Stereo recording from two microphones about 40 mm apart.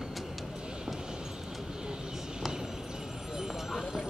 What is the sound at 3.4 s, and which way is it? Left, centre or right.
Clip-clop, centre.